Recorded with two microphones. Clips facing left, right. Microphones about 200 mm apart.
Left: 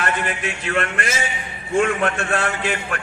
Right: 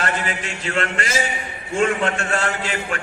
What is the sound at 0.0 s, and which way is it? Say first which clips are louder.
A man's voice: left 1 dB; 60° left (ahead or behind).